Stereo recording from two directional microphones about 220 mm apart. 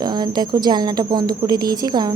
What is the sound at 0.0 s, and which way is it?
Speech, 20° right (ahead or behind).